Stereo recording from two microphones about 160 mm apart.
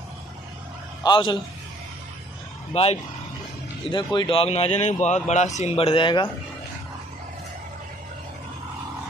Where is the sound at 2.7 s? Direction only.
40° left (ahead or behind).